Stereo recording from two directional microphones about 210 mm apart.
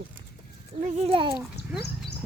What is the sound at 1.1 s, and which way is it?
Speech, 25° right (ahead or behind).